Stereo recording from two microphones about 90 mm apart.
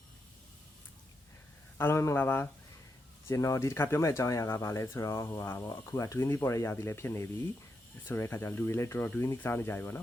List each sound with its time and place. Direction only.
1.8 s speech: 30° left (ahead or behind)
3.2 s speech: 35° left (ahead or behind)